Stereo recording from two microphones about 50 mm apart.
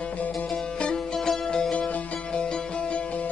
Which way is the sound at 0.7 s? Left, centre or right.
Centre.